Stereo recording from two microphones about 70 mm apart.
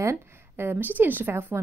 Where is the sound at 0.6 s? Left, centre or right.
Right.